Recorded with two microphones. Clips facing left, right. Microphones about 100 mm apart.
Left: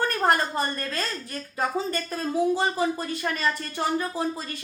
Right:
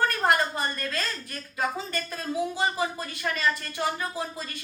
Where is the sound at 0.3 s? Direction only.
35° left (ahead or behind).